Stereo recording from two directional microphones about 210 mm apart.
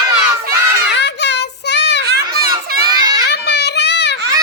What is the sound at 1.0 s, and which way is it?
Child singing, 55° left (ahead or behind).